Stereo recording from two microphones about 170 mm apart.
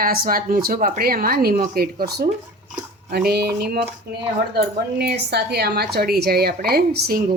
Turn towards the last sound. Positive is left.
turn(degrees=-65)  # may be behind; listen again after turning